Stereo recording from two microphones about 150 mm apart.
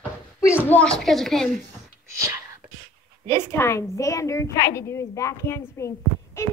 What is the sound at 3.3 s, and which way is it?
A woman's voice, 15° left (ahead or behind).